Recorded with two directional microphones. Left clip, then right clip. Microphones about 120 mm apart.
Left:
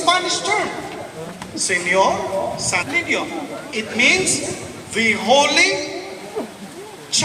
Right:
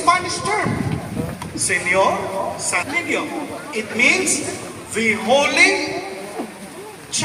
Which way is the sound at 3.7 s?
25° left (ahead or behind).